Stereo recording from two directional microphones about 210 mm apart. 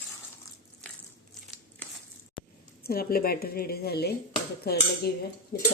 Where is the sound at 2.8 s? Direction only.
45° left (ahead or behind).